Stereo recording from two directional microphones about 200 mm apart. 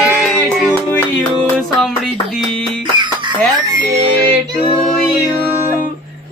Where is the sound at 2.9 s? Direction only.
25° right (ahead or behind).